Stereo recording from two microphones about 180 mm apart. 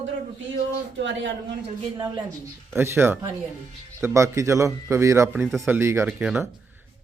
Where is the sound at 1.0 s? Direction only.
90° right.